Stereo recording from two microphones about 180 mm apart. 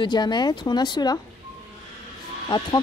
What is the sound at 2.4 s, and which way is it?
Speech, 20° left (ahead or behind).